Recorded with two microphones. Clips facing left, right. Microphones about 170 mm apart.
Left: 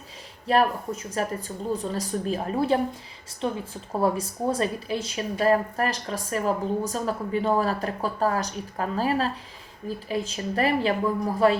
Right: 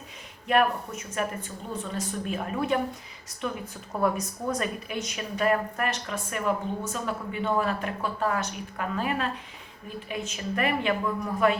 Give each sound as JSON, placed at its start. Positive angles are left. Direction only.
{"t": 0.4, "sound": "speech", "side_deg": 35}